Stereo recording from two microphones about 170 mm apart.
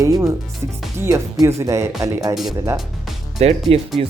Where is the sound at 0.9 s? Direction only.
15° right (ahead or behind).